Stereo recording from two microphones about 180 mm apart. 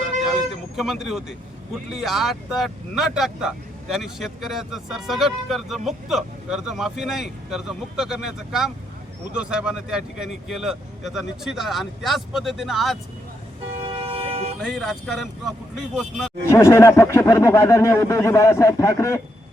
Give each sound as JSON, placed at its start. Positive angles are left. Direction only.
{"t": 0.3, "sound": "vehicle", "side_deg": 0}
{"t": 1.9, "sound": "speech", "side_deg": 0}
{"t": 13.8, "sound": "vehicle", "side_deg": -30}
{"t": 14.6, "sound": "speech", "side_deg": 0}
{"t": 16.5, "sound": "speech", "side_deg": 15}